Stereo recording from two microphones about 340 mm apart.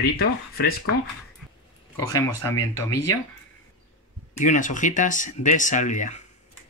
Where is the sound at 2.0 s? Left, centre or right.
Centre.